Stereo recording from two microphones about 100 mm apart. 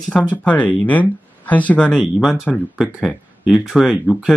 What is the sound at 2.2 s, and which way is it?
Speech, 5° right (ahead or behind).